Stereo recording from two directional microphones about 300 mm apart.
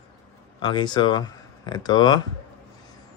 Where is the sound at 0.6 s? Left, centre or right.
Centre.